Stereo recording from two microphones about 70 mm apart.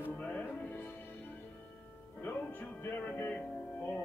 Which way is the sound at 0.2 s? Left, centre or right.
Left.